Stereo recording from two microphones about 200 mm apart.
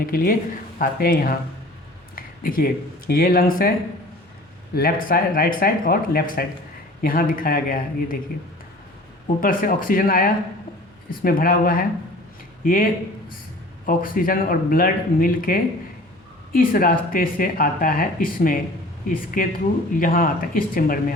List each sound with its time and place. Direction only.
0.0 s speech: 45° left (ahead or behind)
2.1 s a sound: 45° left (ahead or behind)
3.1 s speech: 45° left (ahead or behind)
4.7 s speech: 45° left (ahead or behind)
9.4 s speech: 45° left (ahead or behind)